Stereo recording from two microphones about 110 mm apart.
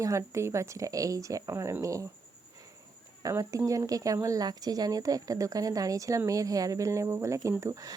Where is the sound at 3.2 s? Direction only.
30° right (ahead or behind).